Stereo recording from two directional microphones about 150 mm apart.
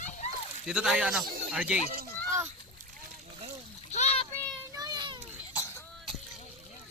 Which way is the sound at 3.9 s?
45° left (ahead or behind).